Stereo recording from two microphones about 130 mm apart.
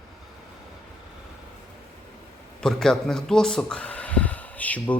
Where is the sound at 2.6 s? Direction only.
5° left (ahead or behind).